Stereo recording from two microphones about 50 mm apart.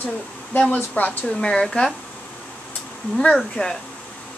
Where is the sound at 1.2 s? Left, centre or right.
Centre.